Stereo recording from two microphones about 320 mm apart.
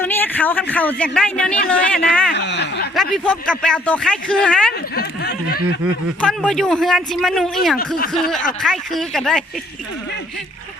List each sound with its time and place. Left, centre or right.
0.0 s a man's voice: centre
2.3 s speech: left
2.9 s a man's voice: centre
4.9 s a sound: left
6.2 s a man's voice: centre